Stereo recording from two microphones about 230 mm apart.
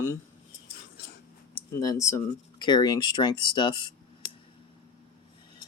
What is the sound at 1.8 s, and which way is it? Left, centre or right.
Speech, centre.